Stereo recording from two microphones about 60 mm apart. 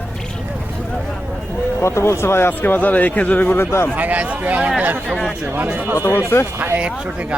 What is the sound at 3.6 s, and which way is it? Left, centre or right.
Speech, left.